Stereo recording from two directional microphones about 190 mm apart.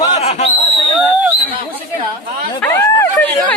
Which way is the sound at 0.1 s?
35° left (ahead or behind).